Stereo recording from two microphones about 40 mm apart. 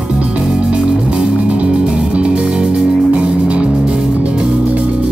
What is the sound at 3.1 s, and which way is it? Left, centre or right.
Music, right.